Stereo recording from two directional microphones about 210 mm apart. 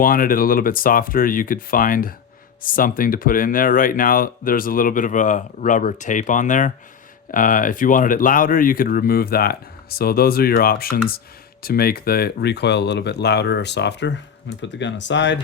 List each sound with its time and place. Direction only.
0.0 s speech: 40° left (ahead or behind); by 15.4 s 60° left (ahead or behind)